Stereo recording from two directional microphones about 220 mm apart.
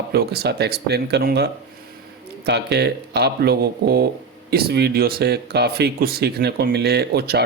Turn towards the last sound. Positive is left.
turn(degrees=-45)  # may be behind; listen again after turning